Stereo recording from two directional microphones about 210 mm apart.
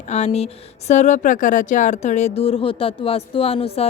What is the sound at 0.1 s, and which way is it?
A woman's voice, 30° left (ahead or behind).